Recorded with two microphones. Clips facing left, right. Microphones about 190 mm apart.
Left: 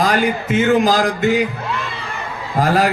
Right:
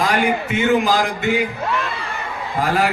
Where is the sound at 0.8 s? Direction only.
40° left (ahead or behind).